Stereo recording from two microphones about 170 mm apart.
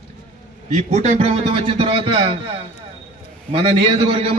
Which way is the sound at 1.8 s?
30° right (ahead or behind).